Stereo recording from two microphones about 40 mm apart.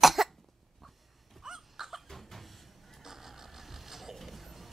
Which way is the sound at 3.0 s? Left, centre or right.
Centre.